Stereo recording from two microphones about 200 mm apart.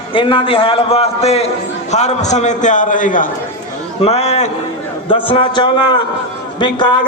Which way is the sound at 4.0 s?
30° left (ahead or behind).